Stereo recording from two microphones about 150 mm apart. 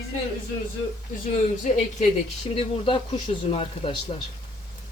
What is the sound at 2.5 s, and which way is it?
Speech, 35° left (ahead or behind).